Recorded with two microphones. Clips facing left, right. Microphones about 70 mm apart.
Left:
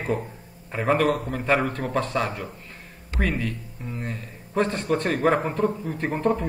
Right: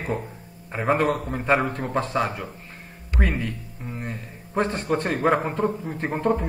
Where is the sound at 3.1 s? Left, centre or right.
Right.